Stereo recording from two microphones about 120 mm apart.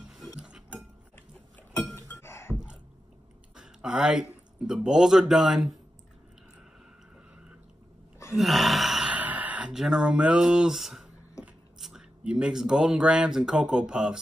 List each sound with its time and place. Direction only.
0.0 s cutlery: centre (ahead or behind)
2.0 s thunk: 20° left (ahead or behind)
2.5 s a sound: 5° right (ahead or behind)
3.5 s speech: 5° right (ahead or behind)
8.4 s gasp: centre (ahead or behind)
11.8 s speech: 5° right (ahead or behind)